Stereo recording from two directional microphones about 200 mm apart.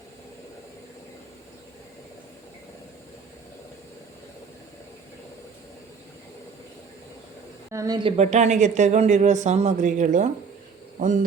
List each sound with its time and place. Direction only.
7.7 s a woman's voice: 15° right (ahead or behind); by 10.2 s 40° right (ahead or behind)